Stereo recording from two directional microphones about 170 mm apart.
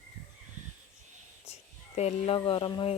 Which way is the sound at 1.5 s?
40° left (ahead or behind).